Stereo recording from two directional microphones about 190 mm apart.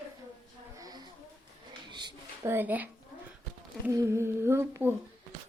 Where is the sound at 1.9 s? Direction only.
25° right (ahead or behind).